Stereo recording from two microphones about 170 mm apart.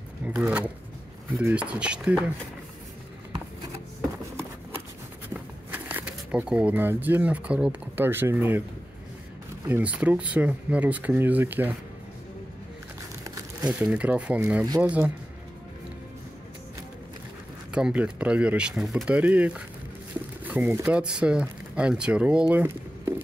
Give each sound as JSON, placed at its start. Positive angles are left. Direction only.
{"t": 0.2, "sound": "speech", "side_deg": -10}
{"t": 5.3, "sound": "speech", "side_deg": -10}
{"t": 9.7, "sound": "speech", "side_deg": -10}
{"t": 13.2, "sound": "crumpling", "side_deg": -20}
{"t": 13.7, "sound": "speech", "side_deg": -5}
{"t": 17.7, "sound": "speech", "side_deg": -5}
{"t": 22.5, "sound": "a sound", "side_deg": -10}